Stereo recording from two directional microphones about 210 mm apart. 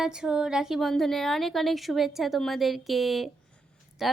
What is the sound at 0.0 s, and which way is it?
A woman's voice, 5° right (ahead or behind).